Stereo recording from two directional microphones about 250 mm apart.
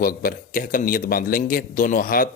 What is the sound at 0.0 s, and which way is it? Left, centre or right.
Speech, left.